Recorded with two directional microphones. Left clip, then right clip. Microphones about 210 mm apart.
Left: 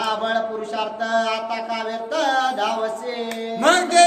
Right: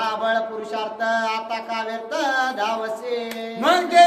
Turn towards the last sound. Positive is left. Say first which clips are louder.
# even
turn(degrees=10)  # may be behind; listen again after turning